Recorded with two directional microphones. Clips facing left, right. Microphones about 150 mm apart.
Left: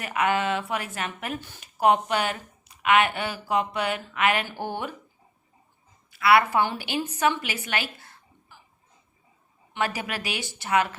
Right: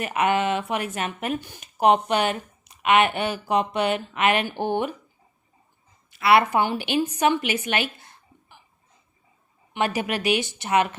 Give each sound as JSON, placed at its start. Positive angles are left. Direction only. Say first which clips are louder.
{"t": 0.0, "sound": "speech", "louder": "right 3 dB", "side_deg": -20}
{"t": 6.1, "sound": "a woman's voice", "louder": "right 1 dB", "side_deg": -25}
{"t": 9.7, "sound": "speech", "louder": "right 4 dB", "side_deg": -20}